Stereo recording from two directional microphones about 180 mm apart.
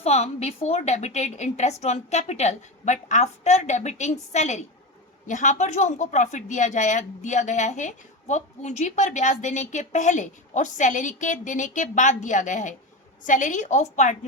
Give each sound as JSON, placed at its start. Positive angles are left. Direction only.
{"t": 0.0, "sound": "a woman's voice", "side_deg": 35}